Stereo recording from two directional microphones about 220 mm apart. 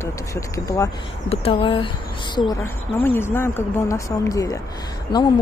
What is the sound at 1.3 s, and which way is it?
Speech, 25° left (ahead or behind).